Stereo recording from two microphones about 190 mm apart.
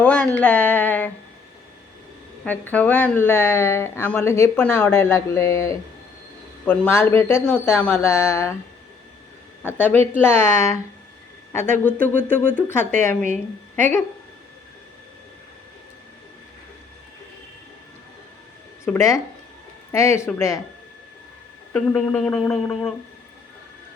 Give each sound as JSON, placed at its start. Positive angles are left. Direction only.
{"t": 0.0, "sound": "speech", "side_deg": 5}
{"t": 2.4, "sound": "speech", "side_deg": 10}
{"t": 9.7, "sound": "speech", "side_deg": 10}
{"t": 18.9, "sound": "speech", "side_deg": 15}
{"t": 21.7, "sound": "speech", "side_deg": 5}